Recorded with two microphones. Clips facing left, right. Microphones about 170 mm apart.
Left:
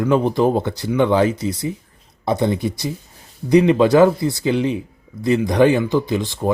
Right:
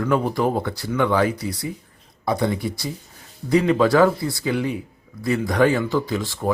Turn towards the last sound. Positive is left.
turn(degrees=20)  # may be behind; listen again after turning